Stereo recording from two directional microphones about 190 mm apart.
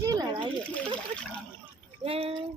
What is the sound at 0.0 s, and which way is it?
Splash, 20° right (ahead or behind).